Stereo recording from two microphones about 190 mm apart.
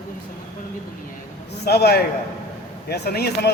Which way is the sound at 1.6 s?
55° left (ahead or behind).